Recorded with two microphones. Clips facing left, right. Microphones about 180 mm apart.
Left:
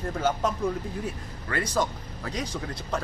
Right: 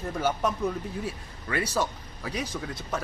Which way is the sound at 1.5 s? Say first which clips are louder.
Left 1 dB; 10° right (ahead or behind).